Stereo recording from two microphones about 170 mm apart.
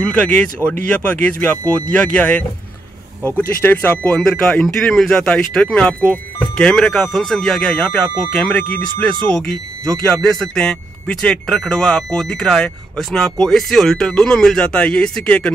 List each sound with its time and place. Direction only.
0.0 s speech: 5° left (ahead or behind)